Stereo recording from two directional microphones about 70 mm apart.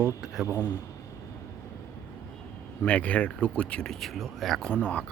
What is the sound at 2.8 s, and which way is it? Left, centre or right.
Speech, centre.